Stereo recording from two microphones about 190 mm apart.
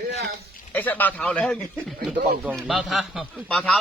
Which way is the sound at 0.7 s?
10° left (ahead or behind).